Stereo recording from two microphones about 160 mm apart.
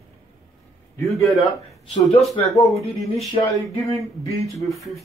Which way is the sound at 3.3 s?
20° left (ahead or behind).